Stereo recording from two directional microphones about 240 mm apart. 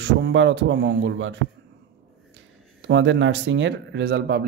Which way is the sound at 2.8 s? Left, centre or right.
Right.